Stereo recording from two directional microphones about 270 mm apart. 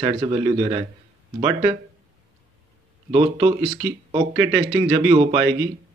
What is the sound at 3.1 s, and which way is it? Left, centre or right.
Speech, centre.